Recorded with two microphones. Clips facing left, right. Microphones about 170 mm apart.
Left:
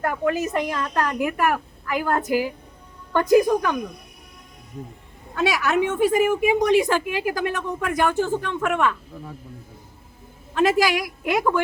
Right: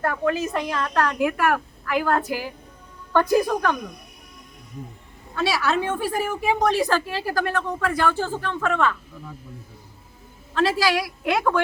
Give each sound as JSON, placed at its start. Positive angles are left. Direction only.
{"t": 0.0, "sound": "a woman's voice", "side_deg": 15}
{"t": 5.4, "sound": "a woman's voice", "side_deg": 15}
{"t": 10.5, "sound": "a woman's voice", "side_deg": 15}